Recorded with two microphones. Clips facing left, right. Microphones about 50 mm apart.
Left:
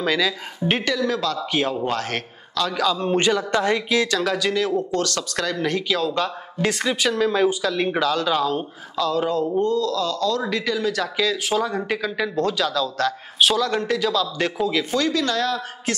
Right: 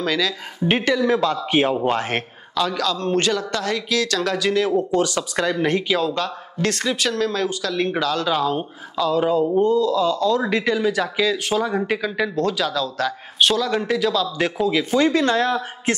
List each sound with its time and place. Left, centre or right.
0.0 s speech: centre
0.8 s a man's voice: centre
2.7 s speech: centre
4.2 s speech: centre
4.7 s speech: centre
5.9 s speech: centre; by 10.9 s right
10.9 s speech: centre
15.0 s a man's voice: right